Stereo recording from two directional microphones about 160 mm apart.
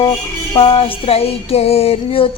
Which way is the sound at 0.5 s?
35° left (ahead or behind).